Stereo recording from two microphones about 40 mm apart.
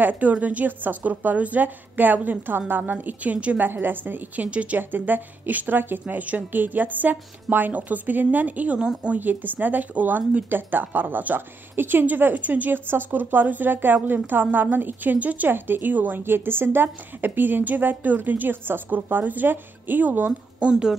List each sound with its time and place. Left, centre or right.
0.0 s a woman's voice: right
3.5 s a woman's voice: right
4.5 s speech: right
4.7 s a woman's voice: right
6.0 s a woman's voice: right
8.7 s speech: right
9.2 s a woman's voice: right
12.4 s a woman's voice: right
15.1 s speech: right
15.5 s a woman's voice: right
16.2 s a woman's voice: right